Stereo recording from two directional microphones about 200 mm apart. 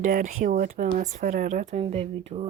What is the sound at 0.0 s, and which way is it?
Speech, 40° right (ahead or behind).